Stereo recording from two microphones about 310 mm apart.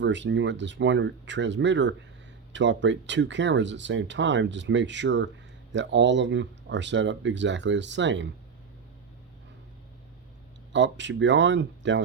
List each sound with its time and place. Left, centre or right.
0.0 s speech: right
10.7 s speech: right